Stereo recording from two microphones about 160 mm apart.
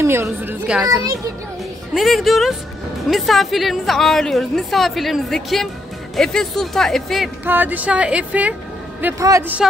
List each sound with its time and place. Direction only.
0.0 s speech: 15° right (ahead or behind)
2.0 s a woman's voice: centre (ahead or behind)
7.4 s speech: 10° right (ahead or behind)
9.0 s speech: 20° right (ahead or behind)
9.6 s a woman's voice: centre (ahead or behind)